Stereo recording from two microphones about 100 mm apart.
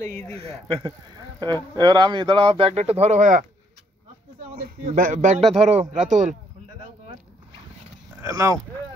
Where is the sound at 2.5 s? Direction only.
75° right (ahead or behind); by 3.1 s 90° right.